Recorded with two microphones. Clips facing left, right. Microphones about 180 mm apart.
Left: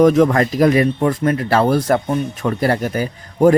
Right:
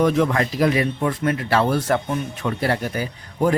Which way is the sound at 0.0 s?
45° left (ahead or behind).